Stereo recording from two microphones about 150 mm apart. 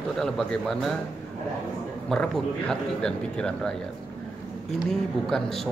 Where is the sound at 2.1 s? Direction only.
5° left (ahead or behind).